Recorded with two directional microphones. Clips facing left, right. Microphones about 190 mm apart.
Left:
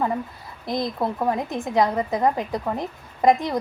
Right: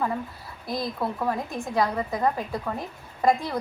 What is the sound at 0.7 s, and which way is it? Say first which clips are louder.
A woman's voice: left 4 dB; 20° left (ahead or behind).